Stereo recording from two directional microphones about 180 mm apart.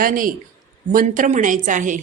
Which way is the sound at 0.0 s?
50° right (ahead or behind).